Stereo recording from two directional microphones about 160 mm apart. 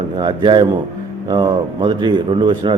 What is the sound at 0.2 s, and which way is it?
A man's voice, 30° right (ahead or behind).